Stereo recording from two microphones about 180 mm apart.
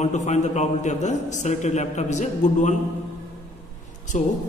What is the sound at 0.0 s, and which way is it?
A man's voice, 40° left (ahead or behind).